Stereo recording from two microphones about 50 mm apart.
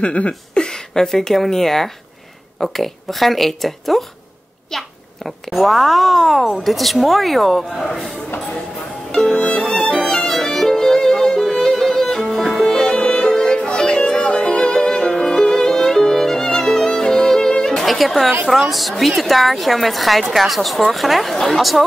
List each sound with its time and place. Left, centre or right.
0.0 s a sound: left
0.3 s a child's voice: centre
9.3 s violin: left
10.3 s music: centre
17.8 s a woman's voice: centre